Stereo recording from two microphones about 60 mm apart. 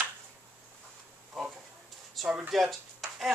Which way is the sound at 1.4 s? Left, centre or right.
Centre.